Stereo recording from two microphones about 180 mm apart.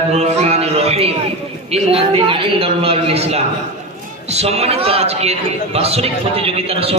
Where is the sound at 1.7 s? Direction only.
30° right (ahead or behind).